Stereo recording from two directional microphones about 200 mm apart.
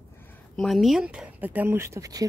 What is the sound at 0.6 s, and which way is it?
Speech, centre (ahead or behind).